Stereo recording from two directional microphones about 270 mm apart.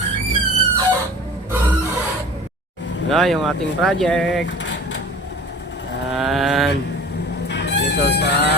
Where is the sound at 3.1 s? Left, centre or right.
Centre.